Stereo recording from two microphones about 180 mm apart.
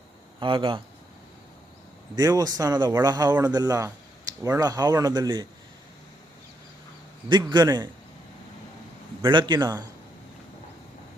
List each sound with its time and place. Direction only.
0.3 s speech: 25° right (ahead or behind)
2.1 s speech: 20° right (ahead or behind)
7.3 s speech: 25° right (ahead or behind)
9.2 s speech: 25° right (ahead or behind)